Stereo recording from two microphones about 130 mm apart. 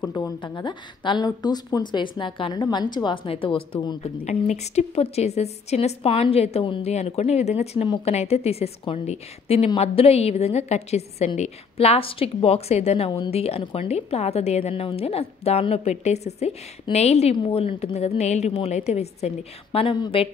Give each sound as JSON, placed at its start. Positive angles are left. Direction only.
{"t": 0.1, "sound": "a woman's voice", "side_deg": 30}
{"t": 17.4, "sound": "a woman's voice", "side_deg": 45}